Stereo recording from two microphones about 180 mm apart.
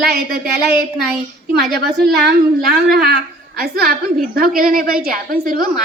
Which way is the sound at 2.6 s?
55° right (ahead or behind).